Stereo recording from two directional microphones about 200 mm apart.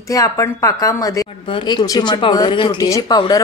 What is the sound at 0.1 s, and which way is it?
Speech, 15° left (ahead or behind).